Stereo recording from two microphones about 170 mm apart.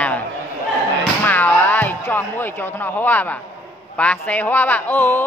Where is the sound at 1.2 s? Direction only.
10° left (ahead or behind).